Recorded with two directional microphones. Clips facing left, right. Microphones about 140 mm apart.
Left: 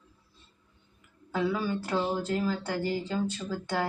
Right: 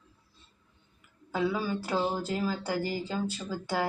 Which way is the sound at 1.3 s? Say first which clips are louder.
Left 1 dB; 5° right (ahead or behind).